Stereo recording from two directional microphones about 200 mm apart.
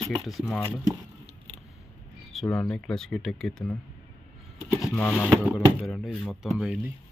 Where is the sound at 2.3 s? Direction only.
Centre (ahead or behind).